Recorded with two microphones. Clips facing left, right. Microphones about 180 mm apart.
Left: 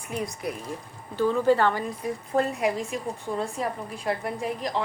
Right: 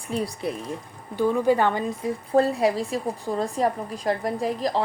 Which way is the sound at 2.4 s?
35° right (ahead or behind).